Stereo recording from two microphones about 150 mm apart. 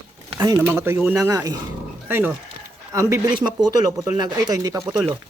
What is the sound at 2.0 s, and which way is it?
Speech, 15° right (ahead or behind).